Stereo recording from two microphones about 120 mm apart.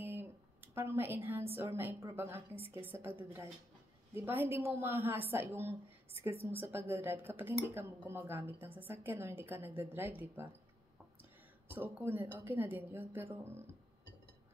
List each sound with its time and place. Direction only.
0.0 s a woman's voice: 20° right (ahead or behind)
11.7 s speech: 20° right (ahead or behind)